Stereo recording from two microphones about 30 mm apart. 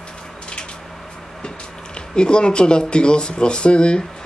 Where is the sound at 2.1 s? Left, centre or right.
Left.